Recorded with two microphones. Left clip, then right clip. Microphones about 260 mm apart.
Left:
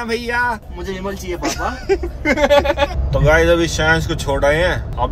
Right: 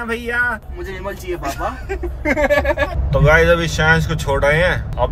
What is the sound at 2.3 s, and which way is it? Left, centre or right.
Speech, centre.